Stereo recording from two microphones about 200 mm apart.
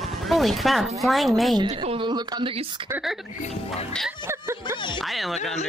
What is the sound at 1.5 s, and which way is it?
Speech, 25° right (ahead or behind).